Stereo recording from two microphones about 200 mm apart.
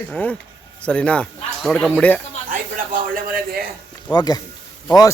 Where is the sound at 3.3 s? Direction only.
50° right (ahead or behind).